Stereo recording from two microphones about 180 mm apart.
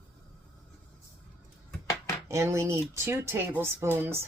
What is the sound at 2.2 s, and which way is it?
Speech, 15° right (ahead or behind).